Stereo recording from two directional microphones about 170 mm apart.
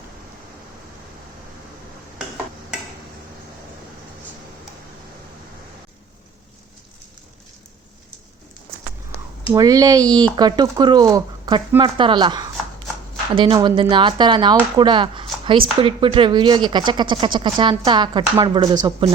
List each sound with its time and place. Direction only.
9.1 s speech: 20° right (ahead or behind)